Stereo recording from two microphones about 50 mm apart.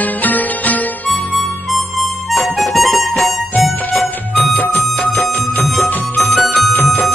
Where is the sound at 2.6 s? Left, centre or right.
Centre.